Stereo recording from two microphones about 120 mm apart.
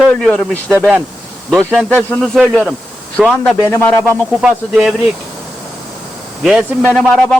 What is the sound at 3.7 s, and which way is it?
Speech, 20° left (ahead or behind).